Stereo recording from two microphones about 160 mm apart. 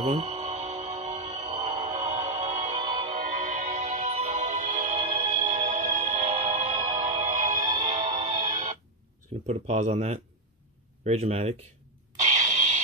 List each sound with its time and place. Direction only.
0.0 s music: 40° right (ahead or behind)
9.5 s speech: 45° right (ahead or behind)